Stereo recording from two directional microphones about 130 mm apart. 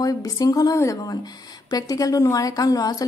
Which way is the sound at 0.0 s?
30° left (ahead or behind).